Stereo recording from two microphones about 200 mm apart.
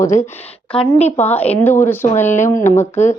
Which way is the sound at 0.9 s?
30° left (ahead or behind).